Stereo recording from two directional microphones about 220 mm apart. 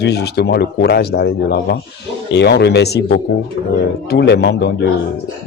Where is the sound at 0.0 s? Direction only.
50° left (ahead or behind).